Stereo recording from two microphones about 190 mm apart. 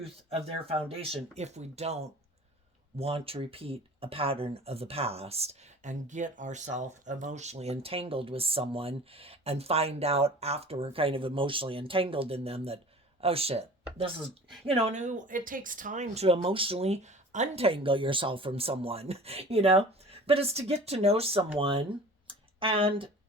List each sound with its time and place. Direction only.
0.0 s speech: 30° right (ahead or behind)
14.7 s speech: 35° right (ahead or behind)
22.3 s a sound: 30° right (ahead or behind)